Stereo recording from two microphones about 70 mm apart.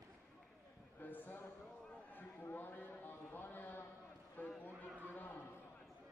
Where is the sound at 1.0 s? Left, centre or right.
Left.